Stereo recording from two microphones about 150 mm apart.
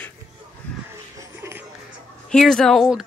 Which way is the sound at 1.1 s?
15° right (ahead or behind).